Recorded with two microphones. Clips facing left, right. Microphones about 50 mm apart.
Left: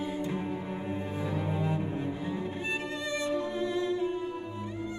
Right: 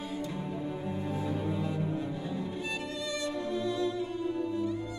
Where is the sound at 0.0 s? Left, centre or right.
Left.